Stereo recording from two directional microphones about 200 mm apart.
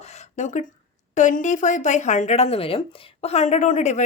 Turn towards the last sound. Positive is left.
turn(degrees=35)  # may be behind; listen again after turning